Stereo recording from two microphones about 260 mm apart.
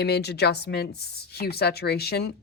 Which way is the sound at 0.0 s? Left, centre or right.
Left.